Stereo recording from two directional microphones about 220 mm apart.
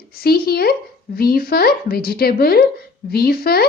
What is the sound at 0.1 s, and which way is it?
Speech, 45° left (ahead or behind).